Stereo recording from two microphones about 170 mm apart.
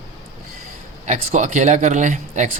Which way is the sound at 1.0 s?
45° right (ahead or behind).